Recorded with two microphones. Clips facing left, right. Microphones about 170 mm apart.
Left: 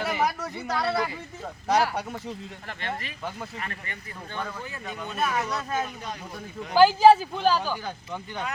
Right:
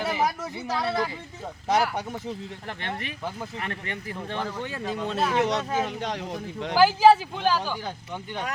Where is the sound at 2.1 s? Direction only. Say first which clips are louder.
Right 2 dB; 15° right (ahead or behind).